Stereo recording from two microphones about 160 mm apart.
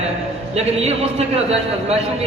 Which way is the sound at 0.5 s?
40° right (ahead or behind).